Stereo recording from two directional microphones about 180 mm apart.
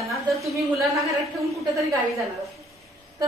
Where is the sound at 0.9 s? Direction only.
15° right (ahead or behind).